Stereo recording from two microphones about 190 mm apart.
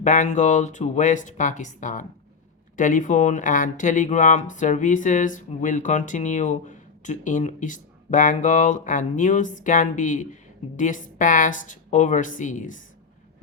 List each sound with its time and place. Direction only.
0.0 s a woman's voice: 40° left (ahead or behind)